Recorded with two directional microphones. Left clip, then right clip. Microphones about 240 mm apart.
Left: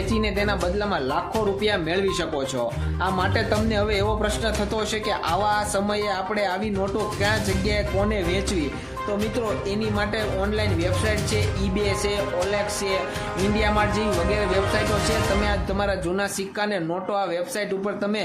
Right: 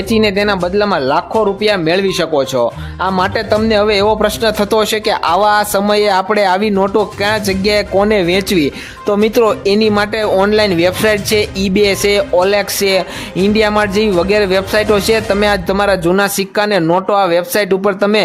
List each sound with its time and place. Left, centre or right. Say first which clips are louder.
0.1 s speech: right 13 dB; right